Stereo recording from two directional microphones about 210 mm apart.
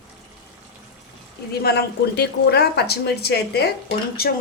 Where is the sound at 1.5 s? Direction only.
50° left (ahead or behind).